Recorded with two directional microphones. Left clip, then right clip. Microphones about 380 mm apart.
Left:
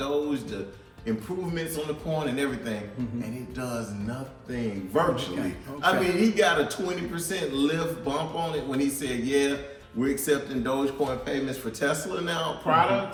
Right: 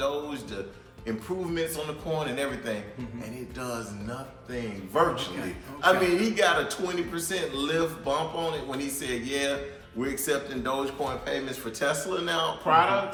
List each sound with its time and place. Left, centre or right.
0.0 s music: centre
2.0 s a man's voice: centre